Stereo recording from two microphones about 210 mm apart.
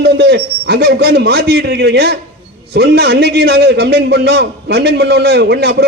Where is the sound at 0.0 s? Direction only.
55° right (ahead or behind).